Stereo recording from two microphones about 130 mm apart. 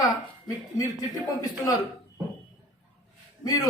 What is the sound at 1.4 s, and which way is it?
Speech, 30° left (ahead or behind).